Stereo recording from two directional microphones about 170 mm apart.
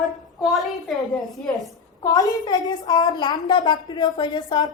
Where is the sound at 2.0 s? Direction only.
20° left (ahead or behind).